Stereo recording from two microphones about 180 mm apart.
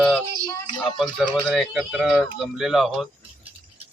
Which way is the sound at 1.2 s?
Centre (ahead or behind).